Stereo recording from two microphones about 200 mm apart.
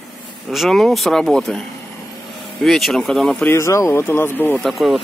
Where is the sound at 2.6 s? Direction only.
Centre (ahead or behind).